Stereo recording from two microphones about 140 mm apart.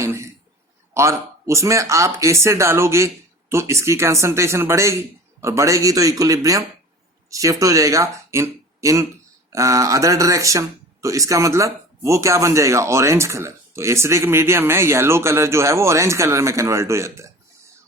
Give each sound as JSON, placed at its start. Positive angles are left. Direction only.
{"t": 0.0, "sound": "throat clearing", "side_deg": -20}
{"t": 0.9, "sound": "speech", "side_deg": -20}